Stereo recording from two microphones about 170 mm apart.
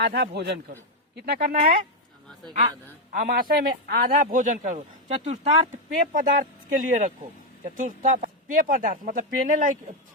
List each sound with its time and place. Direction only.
0.0 s a man's voice: 80° right
1.1 s speech: 70° right (ahead or behind)
3.1 s a man's voice: 50° right (ahead or behind)